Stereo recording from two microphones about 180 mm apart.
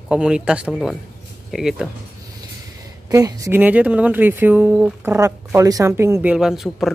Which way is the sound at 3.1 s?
20° right (ahead or behind).